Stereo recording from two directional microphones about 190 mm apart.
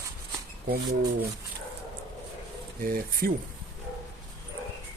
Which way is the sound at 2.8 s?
45° right (ahead or behind).